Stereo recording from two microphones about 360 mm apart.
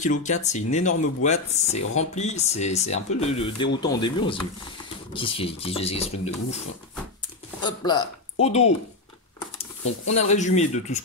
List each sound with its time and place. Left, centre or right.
0.0 s speech: centre
7.6 s speech: centre
10.0 s speech: centre